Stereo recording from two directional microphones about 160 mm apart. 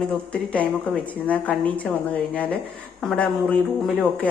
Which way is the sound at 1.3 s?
10° left (ahead or behind).